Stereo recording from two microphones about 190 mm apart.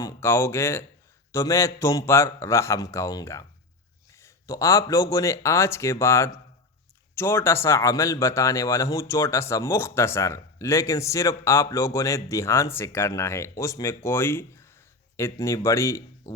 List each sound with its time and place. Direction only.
0.0 s speech: 15° left (ahead or behind)